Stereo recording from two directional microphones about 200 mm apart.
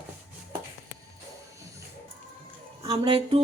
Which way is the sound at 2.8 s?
25° right (ahead or behind).